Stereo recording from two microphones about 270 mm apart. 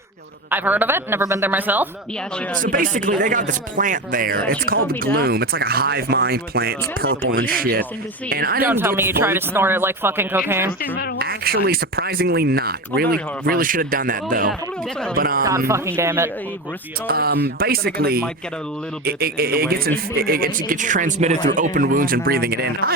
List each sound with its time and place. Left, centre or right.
0.5 s speech: centre
2.6 s speech: right
8.6 s speech: centre
11.2 s speech: right
15.4 s speech: centre
17.1 s speech: right